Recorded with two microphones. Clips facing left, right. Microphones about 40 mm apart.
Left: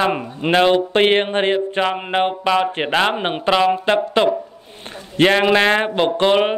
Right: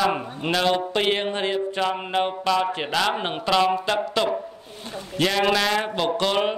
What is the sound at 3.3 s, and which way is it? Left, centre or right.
Speech, left.